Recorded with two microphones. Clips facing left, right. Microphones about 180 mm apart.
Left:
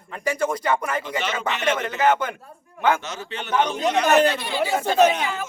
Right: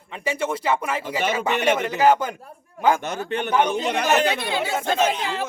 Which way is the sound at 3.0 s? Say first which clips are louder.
Right 7 dB; 55° right (ahead or behind).